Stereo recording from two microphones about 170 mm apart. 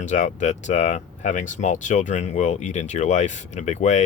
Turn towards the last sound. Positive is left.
turn(degrees=45)  # may be behind; listen again after turning